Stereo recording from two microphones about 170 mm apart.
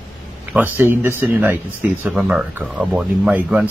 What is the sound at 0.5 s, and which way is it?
Speech, 10° right (ahead or behind).